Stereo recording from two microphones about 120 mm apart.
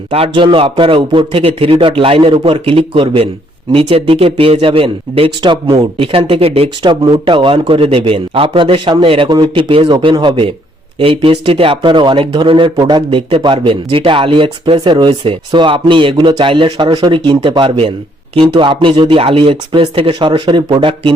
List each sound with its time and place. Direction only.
0.1 s speech: 50° right (ahead or behind)
5.4 s speech: 40° right (ahead or behind)